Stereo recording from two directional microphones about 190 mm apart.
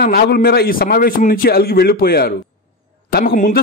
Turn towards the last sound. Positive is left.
turn(degrees=45)  # may be behind; listen again after turning